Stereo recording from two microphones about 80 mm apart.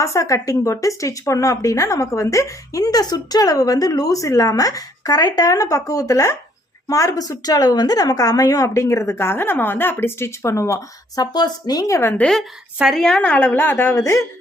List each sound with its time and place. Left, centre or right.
0.0 s a woman's voice: left
11.2 s speech: left
12.3 s a woman's voice: centre; by 14.0 s left